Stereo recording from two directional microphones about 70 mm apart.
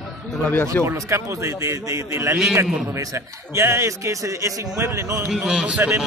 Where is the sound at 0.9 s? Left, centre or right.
Right.